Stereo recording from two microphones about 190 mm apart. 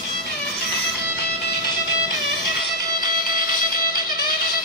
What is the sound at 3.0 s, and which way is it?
Music, 50° left (ahead or behind).